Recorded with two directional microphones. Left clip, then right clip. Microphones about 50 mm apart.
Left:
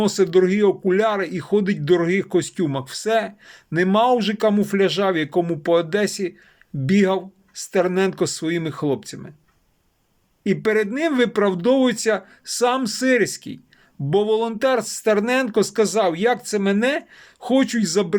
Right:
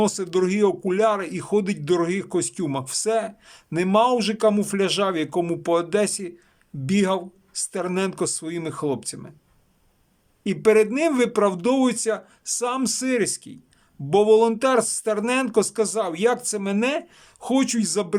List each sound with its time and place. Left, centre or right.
0.3 s speech: right
3.2 s speech: right
10.4 s speech: right
12.5 s speech: right
12.8 s speech: right
14.1 s speech: right